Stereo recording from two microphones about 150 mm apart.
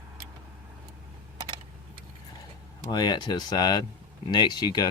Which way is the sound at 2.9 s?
30° left (ahead or behind).